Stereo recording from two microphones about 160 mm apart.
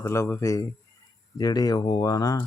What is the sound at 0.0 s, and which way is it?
Speech, 15° left (ahead or behind).